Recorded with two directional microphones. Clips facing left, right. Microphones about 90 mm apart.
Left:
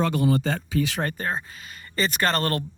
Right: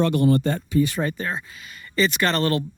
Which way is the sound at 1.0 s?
50° left (ahead or behind).